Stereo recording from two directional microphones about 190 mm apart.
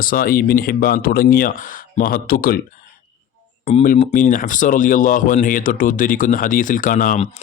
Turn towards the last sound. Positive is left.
turn(degrees=45)  # may be behind; listen again after turning